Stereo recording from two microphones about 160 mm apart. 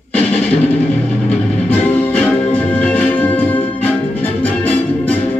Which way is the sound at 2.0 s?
10° left (ahead or behind).